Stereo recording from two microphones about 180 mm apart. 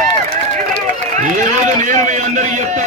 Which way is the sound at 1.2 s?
40° right (ahead or behind).